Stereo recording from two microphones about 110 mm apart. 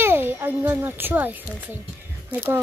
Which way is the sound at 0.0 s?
20° right (ahead or behind).